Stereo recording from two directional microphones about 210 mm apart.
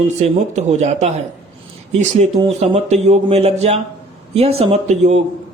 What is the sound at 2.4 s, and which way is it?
Speech, 30° right (ahead or behind).